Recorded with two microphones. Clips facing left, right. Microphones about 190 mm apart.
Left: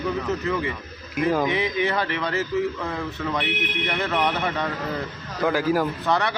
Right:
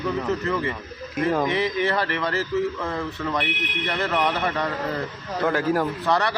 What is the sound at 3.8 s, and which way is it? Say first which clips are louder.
A man's voice: right 1 dB; centre (ahead or behind).